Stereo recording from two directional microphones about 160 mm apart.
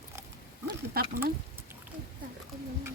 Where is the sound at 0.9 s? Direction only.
75° right (ahead or behind).